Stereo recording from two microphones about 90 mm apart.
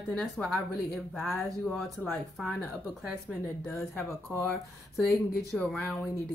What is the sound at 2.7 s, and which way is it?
A woman's voice, 5° right (ahead or behind).